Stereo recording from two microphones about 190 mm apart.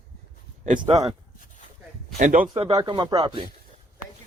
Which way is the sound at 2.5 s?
25° right (ahead or behind).